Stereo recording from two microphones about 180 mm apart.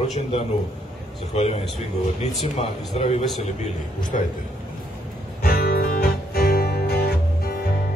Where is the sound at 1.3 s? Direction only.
35° left (ahead or behind).